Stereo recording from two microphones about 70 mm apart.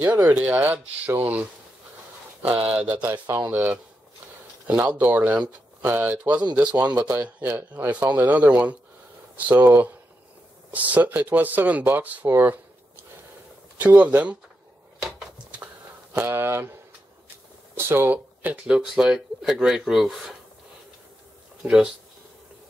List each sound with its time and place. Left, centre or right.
0.0 s speech: right
2.6 s speech: centre
13.7 s speech: centre
15.0 s a sound: centre
15.5 s a sound: centre
16.2 s speech: right
17.7 s speech: right; by 20.3 s centre
21.6 s speech: centre